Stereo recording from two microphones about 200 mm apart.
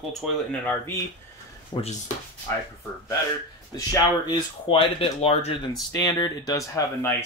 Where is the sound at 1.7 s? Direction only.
30° left (ahead or behind).